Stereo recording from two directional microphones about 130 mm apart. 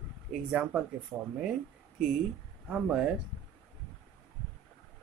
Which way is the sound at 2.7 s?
5° right (ahead or behind).